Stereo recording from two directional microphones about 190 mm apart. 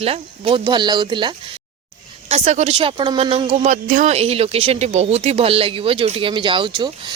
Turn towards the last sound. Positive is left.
turn(degrees=-25)  # may be behind; listen again after turning